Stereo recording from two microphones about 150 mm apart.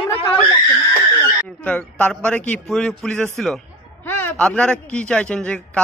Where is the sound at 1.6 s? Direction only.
10° left (ahead or behind).